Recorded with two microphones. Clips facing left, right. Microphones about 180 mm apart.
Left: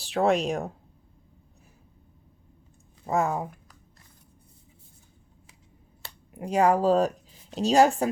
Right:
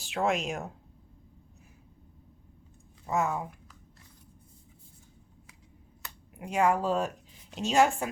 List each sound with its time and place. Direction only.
0.0 s speech: 35° left (ahead or behind)
3.1 s speech: 35° left (ahead or behind)
6.0 s speech: 35° left (ahead or behind)